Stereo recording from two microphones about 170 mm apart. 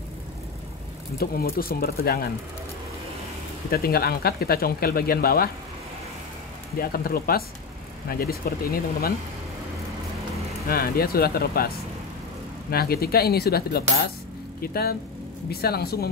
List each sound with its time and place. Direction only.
1.1 s speech: 60° left (ahead or behind)
3.7 s speech: 65° left (ahead or behind)
6.8 s speech: 60° left (ahead or behind)
10.7 s speech: 65° left (ahead or behind)
12.7 s speech: 65° left (ahead or behind)